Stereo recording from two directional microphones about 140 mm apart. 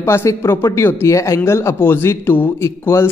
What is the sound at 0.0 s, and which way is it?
Speech, 20° left (ahead or behind).